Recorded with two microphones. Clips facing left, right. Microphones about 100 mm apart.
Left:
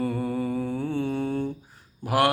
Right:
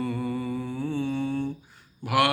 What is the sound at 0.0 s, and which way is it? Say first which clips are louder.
Mantra: left 2 dB; 45° left (ahead or behind).